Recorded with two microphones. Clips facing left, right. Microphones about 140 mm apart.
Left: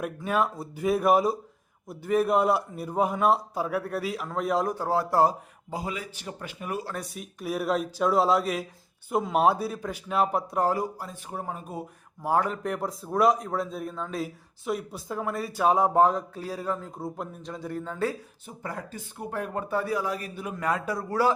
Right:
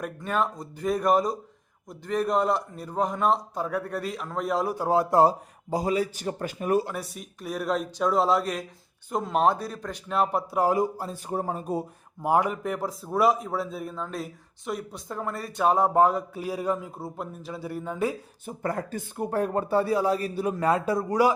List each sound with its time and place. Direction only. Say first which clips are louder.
0.0 s a man's voice: left 1 dB; 5° left (ahead or behind)
4.7 s speech: right 3 dB; 15° right (ahead or behind)
5.7 s a man's voice: right 8 dB; 40° right (ahead or behind)
7.0 s a man's voice: left 2 dB; centre (ahead or behind)
10.7 s speech: right 4 dB; 25° right (ahead or behind)
12.2 s speech: right 2 dB; 15° right (ahead or behind)
12.6 s a man's voice: even; centre (ahead or behind)
17.0 s speech: left 1 dB; 5° right (ahead or behind)
18.4 s speech: right 7 dB; 50° right (ahead or behind); by 21.3 s 15° right (ahead or behind)